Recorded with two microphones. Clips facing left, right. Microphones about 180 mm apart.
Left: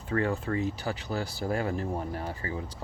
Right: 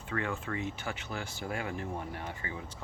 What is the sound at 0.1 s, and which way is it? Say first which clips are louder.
Speech: left 7 dB; 35° left (ahead or behind).